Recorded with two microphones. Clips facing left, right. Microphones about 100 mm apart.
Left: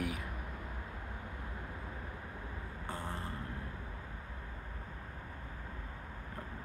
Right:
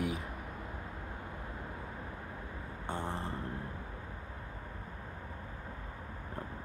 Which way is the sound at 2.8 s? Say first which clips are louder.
Right 4 dB; 30° right (ahead or behind).